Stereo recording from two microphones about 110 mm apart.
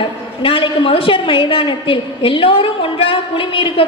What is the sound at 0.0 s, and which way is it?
A woman's voice, 50° left (ahead or behind).